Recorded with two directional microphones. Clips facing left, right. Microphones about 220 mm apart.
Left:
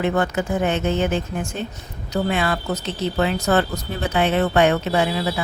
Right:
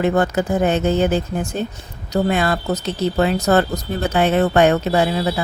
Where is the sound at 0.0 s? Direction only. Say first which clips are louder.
Right 3 dB; 40° right (ahead or behind).